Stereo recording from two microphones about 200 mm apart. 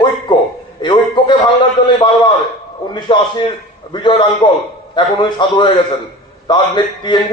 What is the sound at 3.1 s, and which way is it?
A man's voice, 25° left (ahead or behind).